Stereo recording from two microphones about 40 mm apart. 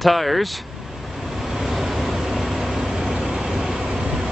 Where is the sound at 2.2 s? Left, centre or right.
Centre.